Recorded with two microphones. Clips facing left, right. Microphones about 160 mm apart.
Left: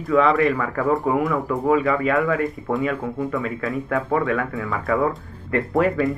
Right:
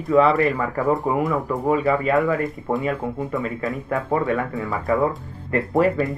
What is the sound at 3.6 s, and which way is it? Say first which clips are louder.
Speech: left 1 dB; centre (ahead or behind).